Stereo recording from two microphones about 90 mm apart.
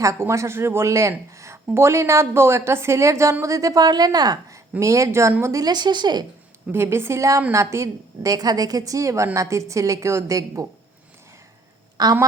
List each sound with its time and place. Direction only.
0.0 s a woman's voice: 35° right (ahead or behind); by 6.2 s 55° right (ahead or behind)
6.7 s a woman's voice: 25° right (ahead or behind)
12.0 s a woman's voice: 45° right (ahead or behind)